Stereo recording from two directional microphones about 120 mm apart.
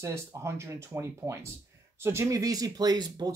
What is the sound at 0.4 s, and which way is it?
Speech, 25° right (ahead or behind).